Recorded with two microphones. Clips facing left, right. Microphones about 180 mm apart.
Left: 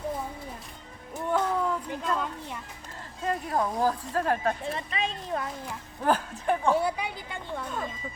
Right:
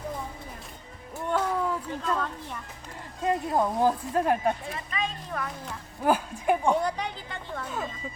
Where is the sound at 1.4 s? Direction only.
5° right (ahead or behind).